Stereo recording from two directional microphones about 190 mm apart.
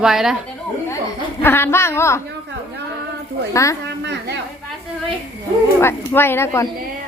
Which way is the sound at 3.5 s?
15° left (ahead or behind).